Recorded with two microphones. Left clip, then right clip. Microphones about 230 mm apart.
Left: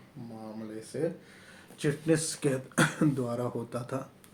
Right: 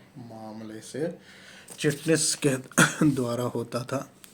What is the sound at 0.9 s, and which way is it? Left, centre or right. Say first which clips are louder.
Speech: right 1 dB; right.